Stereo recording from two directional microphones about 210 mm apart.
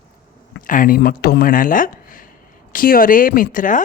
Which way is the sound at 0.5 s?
40° left (ahead or behind).